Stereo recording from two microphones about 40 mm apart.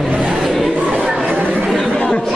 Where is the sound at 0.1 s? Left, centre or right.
Centre.